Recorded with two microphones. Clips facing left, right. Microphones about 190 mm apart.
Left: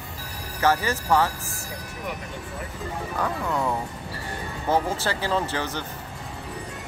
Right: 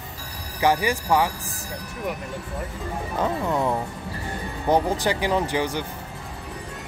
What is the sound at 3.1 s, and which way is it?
Speech, 20° right (ahead or behind).